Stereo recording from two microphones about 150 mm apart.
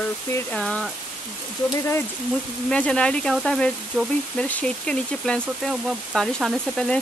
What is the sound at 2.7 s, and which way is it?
Speech, 5° left (ahead or behind).